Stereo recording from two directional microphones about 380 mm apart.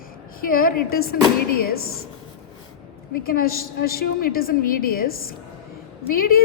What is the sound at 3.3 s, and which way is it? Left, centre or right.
A woman's voice, left.